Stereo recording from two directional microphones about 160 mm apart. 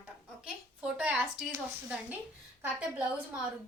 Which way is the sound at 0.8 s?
5° right (ahead or behind).